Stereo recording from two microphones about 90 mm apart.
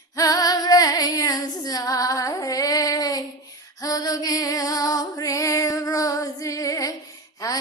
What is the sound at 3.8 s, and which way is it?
Music, 45° left (ahead or behind).